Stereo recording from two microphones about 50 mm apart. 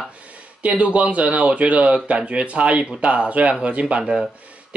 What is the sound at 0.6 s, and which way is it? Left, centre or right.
Speech, right.